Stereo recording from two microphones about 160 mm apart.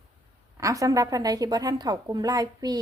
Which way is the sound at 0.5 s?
20° right (ahead or behind).